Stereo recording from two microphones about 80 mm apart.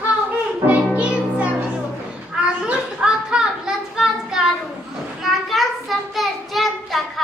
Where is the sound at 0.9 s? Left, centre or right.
Centre.